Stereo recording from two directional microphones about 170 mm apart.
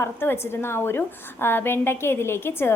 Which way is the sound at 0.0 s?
15° left (ahead or behind).